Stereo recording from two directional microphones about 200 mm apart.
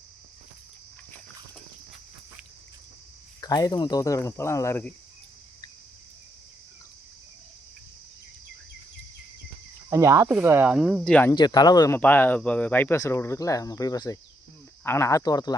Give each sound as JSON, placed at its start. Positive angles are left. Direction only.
{"t": 3.4, "sound": "speech", "side_deg": 20}
{"t": 9.9, "sound": "speech", "side_deg": -15}
{"t": 11.3, "sound": "speech", "side_deg": 20}